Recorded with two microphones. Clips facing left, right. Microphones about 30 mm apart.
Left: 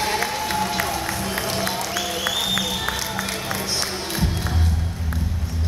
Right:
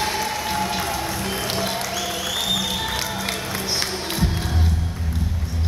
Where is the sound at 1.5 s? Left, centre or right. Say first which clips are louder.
Even; centre.